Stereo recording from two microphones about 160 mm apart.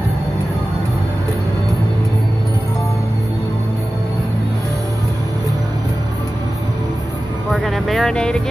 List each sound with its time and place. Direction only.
7.5 s music: centre (ahead or behind)